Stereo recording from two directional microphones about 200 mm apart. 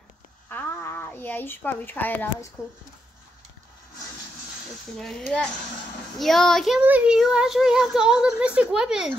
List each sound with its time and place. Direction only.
0.5 s a sound: 10° left (ahead or behind)
2.6 s speech: 5° right (ahead or behind)
4.9 s speech: centre (ahead or behind)